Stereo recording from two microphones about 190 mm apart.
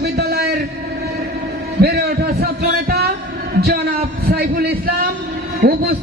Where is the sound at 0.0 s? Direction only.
60° right (ahead or behind).